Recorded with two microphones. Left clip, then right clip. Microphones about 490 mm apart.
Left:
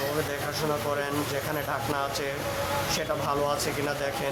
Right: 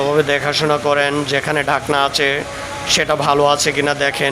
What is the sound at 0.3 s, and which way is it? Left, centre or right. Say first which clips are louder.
Speech: right 13 dB; left.